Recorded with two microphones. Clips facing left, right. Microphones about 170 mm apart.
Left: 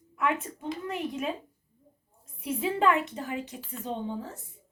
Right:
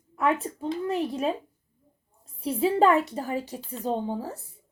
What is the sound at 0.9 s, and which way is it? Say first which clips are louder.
Speech: right 5 dB; 35° right (ahead or behind).